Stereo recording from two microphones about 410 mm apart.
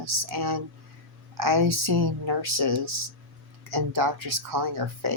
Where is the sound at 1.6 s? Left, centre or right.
Right.